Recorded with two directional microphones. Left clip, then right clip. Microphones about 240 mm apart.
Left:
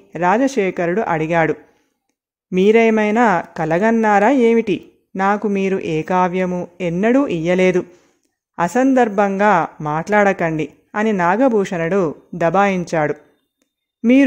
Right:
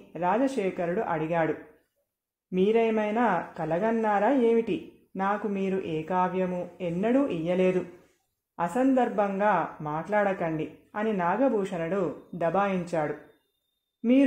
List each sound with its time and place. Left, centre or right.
0.1 s speech: left